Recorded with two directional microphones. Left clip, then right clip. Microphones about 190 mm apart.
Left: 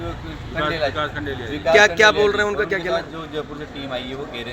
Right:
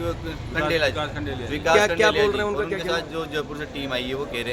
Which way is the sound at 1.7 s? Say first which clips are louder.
Left 5 dB; 10° left (ahead or behind).